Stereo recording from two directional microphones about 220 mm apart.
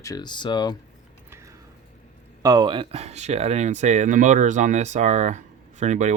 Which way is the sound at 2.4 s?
20° right (ahead or behind).